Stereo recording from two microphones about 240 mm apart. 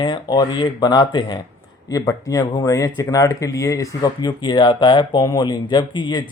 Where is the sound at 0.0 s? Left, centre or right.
Centre.